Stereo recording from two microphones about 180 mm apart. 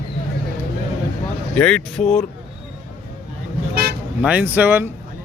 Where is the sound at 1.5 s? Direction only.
5° left (ahead or behind).